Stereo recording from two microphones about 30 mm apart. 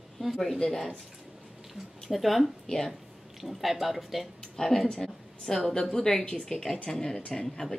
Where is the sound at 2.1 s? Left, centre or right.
Centre.